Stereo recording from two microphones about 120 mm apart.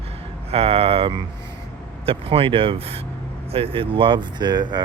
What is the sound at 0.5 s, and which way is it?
Speech, 55° right (ahead or behind).